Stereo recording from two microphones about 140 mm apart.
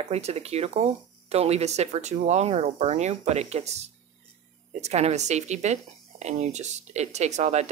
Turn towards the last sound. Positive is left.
turn(degrees=-55)  # may be behind; listen again after turning